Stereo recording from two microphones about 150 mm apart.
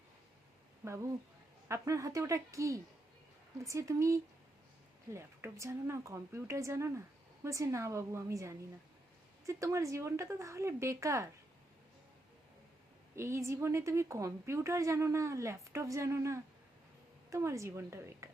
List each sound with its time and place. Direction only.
0.9 s a woman's voice: 20° right (ahead or behind)
13.1 s a woman's voice: 20° right (ahead or behind)